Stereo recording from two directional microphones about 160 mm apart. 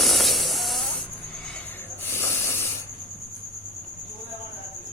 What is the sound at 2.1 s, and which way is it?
Hiss, 15° left (ahead or behind).